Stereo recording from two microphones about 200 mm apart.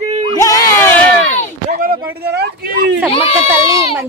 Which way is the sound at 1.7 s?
45° right (ahead or behind).